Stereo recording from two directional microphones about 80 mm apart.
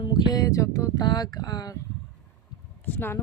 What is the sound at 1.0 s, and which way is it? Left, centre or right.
Speech, left.